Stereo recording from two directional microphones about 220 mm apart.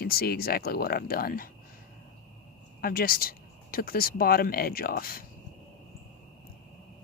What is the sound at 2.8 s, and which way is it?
Speech, 40° left (ahead or behind).